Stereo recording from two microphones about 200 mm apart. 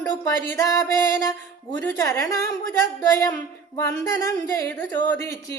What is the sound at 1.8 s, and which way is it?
Speech, 15° left (ahead or behind).